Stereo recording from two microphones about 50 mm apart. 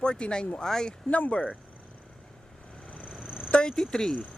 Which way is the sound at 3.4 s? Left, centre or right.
Centre.